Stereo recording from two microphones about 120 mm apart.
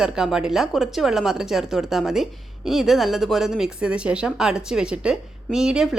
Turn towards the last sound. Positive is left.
turn(degrees=-5)  # may be behind; listen again after turning